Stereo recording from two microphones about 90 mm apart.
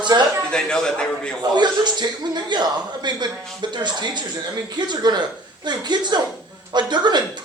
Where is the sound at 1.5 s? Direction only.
55° right (ahead or behind).